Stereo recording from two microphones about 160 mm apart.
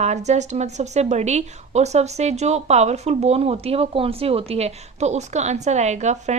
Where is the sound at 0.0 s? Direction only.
45° right (ahead or behind).